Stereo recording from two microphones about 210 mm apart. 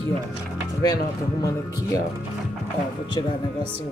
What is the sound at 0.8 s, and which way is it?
Speech, 15° left (ahead or behind).